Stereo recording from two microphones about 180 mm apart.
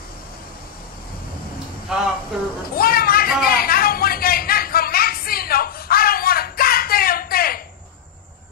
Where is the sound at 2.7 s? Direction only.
55° left (ahead or behind).